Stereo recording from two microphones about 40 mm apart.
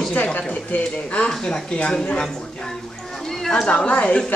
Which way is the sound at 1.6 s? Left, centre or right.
Left.